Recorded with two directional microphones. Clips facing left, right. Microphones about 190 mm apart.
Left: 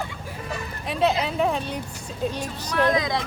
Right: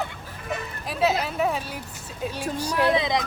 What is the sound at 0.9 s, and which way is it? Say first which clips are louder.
A woman's voice: left 1 dB; 5° right (ahead or behind).